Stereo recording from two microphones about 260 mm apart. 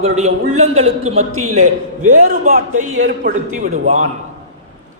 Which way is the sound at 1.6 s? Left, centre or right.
Right.